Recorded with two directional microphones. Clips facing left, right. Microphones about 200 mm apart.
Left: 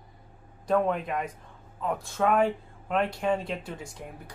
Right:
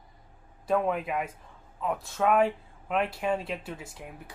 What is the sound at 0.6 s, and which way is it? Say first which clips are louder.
Speech: left 1 dB; 5° right (ahead or behind).